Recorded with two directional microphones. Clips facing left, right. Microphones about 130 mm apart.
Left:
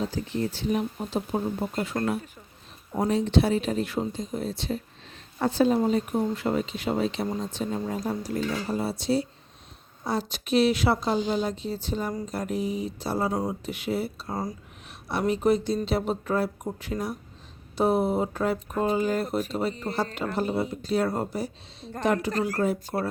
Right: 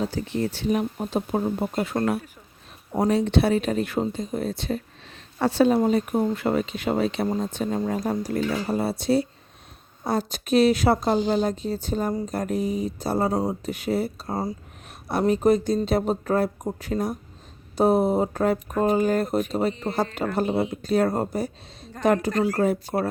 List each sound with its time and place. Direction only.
0.1 s speech: 70° right (ahead or behind)
0.9 s a woman's voice: 55° right (ahead or behind)
3.1 s speech: 65° right (ahead or behind)
5.4 s speech: 70° right (ahead or behind)
5.9 s a woman's voice: 60° right (ahead or behind)
13.3 s a woman's voice: 30° right (ahead or behind); by 23.0 s 50° right (ahead or behind)